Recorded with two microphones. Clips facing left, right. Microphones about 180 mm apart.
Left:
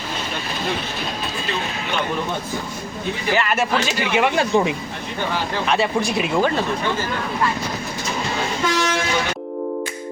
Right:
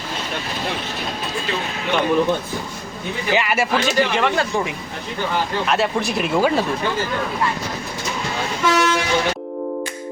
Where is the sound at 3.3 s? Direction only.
10° right (ahead or behind).